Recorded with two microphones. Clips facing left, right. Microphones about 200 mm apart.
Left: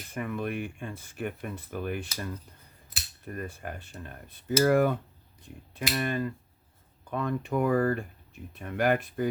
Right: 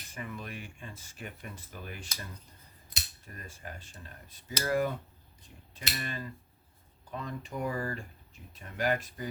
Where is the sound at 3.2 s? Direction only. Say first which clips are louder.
Left 12 dB; 60° left (ahead or behind).